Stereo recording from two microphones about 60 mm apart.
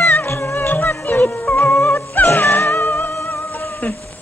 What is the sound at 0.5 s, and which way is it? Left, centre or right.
Music, left.